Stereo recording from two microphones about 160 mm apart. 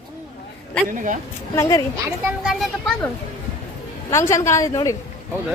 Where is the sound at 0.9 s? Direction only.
55° right (ahead or behind).